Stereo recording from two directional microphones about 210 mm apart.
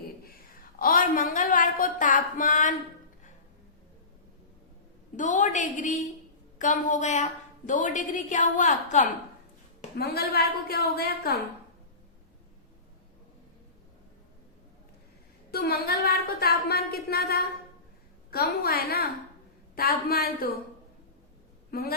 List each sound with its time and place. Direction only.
0.8 s speech: 40° left (ahead or behind)
5.1 s speech: 35° left (ahead or behind)
10.0 s speech: 50° left (ahead or behind)
15.5 s speech: 45° left (ahead or behind)
21.7 s a man's voice: 45° left (ahead or behind)